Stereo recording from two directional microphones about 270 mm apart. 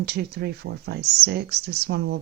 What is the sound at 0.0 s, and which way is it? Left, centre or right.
Speech, right.